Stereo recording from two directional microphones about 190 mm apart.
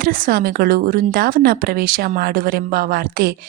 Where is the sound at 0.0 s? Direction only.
50° right (ahead or behind).